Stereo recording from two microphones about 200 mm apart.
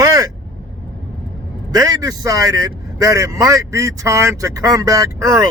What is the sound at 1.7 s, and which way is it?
A man's voice, 20° right (ahead or behind).